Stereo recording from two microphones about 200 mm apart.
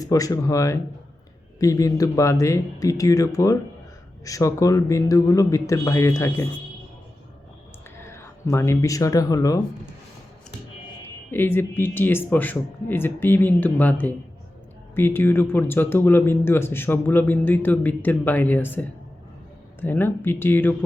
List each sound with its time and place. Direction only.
0.0 s speech: 15° left (ahead or behind)
8.0 s speech: 15° left (ahead or behind)
11.3 s speech: 10° left (ahead or behind)